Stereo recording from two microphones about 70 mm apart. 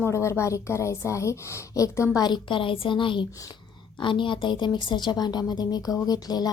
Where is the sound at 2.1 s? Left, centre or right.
Left.